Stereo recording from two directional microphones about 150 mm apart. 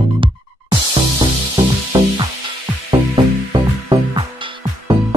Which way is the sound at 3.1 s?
30° right (ahead or behind).